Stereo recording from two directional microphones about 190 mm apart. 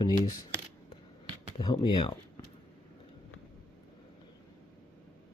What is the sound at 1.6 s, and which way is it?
Speech, 25° left (ahead or behind).